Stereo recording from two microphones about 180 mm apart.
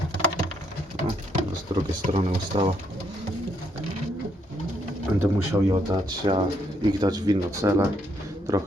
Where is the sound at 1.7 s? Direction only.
25° right (ahead or behind).